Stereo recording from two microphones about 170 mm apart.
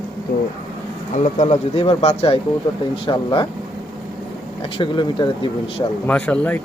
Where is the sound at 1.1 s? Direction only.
45° left (ahead or behind).